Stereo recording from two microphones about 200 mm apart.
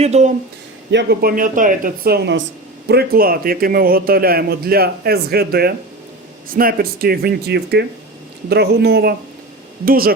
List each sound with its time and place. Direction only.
0.0 s speech: 35° right (ahead or behind)
0.9 s a man's voice: 55° right (ahead or behind)